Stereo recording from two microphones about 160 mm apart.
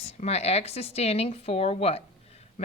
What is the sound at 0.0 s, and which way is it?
Speech, 40° left (ahead or behind).